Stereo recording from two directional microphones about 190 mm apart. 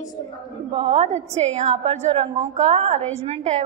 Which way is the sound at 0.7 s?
30° right (ahead or behind).